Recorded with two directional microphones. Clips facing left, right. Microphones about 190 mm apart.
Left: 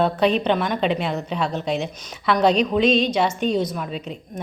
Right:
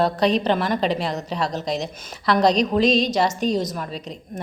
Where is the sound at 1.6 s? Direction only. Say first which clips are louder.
Left 1 dB; 40° right (ahead or behind).